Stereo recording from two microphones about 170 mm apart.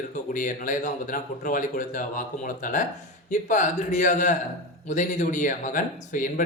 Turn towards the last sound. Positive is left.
turn(degrees=50)  # may be behind; listen again after turning